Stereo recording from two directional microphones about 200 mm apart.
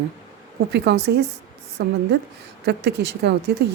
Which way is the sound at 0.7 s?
55° right (ahead or behind).